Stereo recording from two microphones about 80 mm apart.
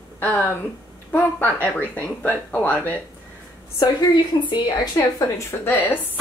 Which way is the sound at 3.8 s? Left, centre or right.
Left.